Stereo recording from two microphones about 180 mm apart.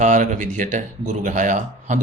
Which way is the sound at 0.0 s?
45° right (ahead or behind).